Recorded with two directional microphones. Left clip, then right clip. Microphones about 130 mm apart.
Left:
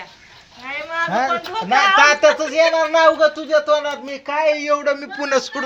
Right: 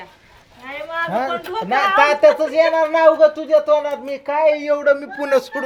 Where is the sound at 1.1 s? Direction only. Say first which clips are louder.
Left 4 dB; 5° right (ahead or behind).